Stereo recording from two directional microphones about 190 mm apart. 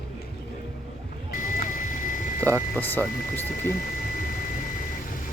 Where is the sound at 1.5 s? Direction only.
45° left (ahead or behind).